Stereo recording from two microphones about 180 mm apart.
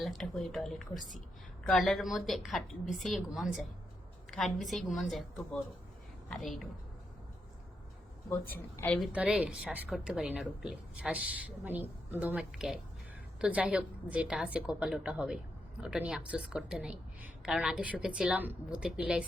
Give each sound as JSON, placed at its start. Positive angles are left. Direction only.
{"t": 0.0, "sound": "a woman's voice", "side_deg": 0}
{"t": 6.2, "sound": "a woman's voice", "side_deg": 0}
{"t": 8.3, "sound": "a woman's voice", "side_deg": 10}
{"t": 9.0, "sound": "a woman's voice", "side_deg": -5}